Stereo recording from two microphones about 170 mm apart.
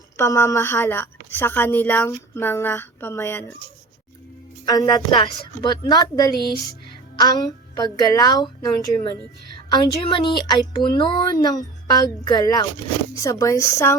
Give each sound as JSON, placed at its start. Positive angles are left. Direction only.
{"t": 0.2, "sound": "a woman's voice", "side_deg": 15}
{"t": 4.6, "sound": "a woman's voice", "side_deg": 25}